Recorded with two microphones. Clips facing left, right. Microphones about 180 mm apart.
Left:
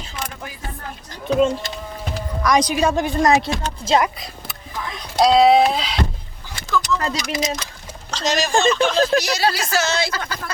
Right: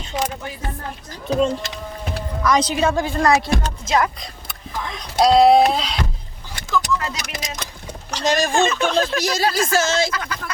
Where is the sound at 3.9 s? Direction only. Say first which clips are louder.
Left 2 dB; 30° left (ahead or behind).